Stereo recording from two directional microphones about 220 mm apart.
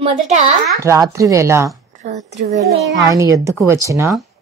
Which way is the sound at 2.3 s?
30° right (ahead or behind).